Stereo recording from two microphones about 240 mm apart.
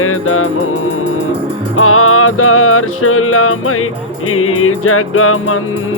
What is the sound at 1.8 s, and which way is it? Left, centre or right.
Music, left.